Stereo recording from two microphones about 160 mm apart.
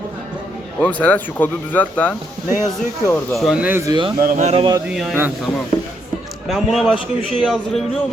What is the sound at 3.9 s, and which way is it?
Speech, 30° right (ahead or behind).